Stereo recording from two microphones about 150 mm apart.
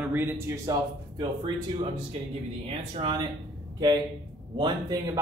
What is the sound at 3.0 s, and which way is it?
Speech, 35° right (ahead or behind).